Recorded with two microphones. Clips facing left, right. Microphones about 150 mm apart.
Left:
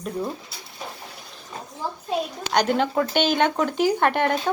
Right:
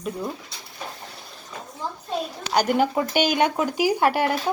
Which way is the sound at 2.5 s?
10° right (ahead or behind).